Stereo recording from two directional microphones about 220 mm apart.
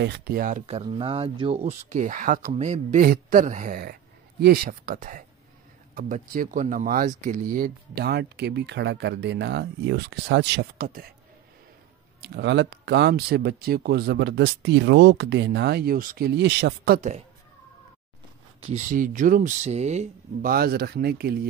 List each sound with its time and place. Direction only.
0.0 s speech: 45° right (ahead or behind)
12.2 s speech: 50° right (ahead or behind)
18.6 s speech: 30° right (ahead or behind)
20.5 s speech: 45° right (ahead or behind)